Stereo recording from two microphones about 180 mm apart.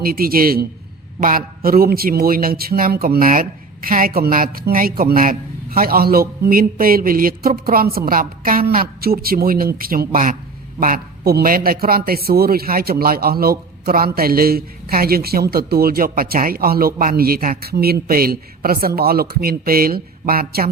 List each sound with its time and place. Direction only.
0.0 s a man's voice: 55° right (ahead or behind)